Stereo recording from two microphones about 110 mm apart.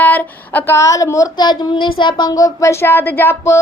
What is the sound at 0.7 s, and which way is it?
Speech, 30° left (ahead or behind).